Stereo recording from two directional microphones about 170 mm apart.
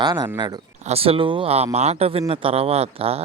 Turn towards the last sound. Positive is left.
turn(degrees=-35)  # may be behind; listen again after turning